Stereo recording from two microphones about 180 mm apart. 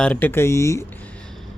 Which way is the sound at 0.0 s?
10° left (ahead or behind).